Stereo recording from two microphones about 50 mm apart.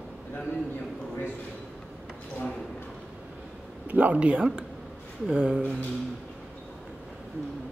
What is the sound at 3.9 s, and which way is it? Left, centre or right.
Speech, right.